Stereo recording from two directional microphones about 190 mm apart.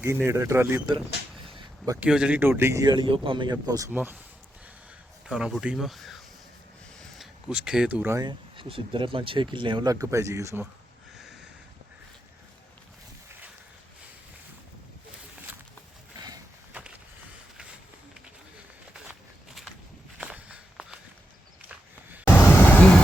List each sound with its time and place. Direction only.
0.0 s speech: 15° right (ahead or behind)
1.5 s a sound: 25° right (ahead or behind)
2.0 s speech: 5° right (ahead or behind); by 3.8 s 20° right (ahead or behind)
3.9 s speech: 10° right (ahead or behind)
5.2 s speech: 5° right (ahead or behind)
11.2 s a sound: centre (ahead or behind)
16.1 s a sound: 20° right (ahead or behind)
20.1 s walk: 5° right (ahead or behind)
22.3 s vehicle: 10° left (ahead or behind)